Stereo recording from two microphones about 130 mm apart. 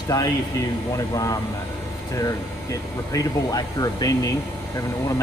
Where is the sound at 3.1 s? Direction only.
30° left (ahead or behind).